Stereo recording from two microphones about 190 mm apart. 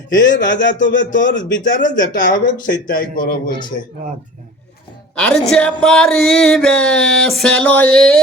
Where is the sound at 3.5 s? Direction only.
25° left (ahead or behind).